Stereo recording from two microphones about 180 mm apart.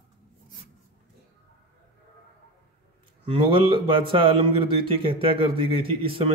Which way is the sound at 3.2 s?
30° right (ahead or behind).